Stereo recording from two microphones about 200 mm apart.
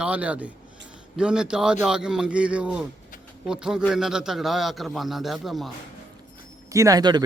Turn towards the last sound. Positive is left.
turn(degrees=-20)  # may be behind; listen again after turning